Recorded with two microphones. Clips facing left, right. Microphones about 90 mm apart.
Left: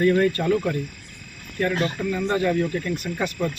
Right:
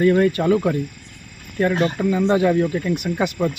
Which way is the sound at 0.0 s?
10° right (ahead or behind).